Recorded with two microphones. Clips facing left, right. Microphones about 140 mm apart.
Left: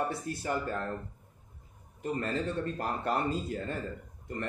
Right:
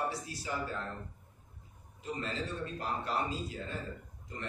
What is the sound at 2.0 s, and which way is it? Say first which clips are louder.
A man's voice: left 6 dB; 55° left (ahead or behind).